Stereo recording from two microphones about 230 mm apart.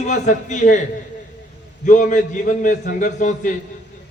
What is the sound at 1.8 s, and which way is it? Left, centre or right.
A man's voice, left.